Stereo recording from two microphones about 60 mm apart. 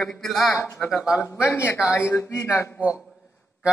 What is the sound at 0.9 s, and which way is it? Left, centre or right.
Speech, centre.